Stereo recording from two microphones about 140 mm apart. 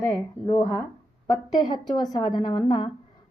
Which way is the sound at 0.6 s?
25° left (ahead or behind).